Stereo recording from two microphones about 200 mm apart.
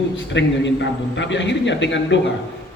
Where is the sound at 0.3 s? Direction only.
65° left (ahead or behind).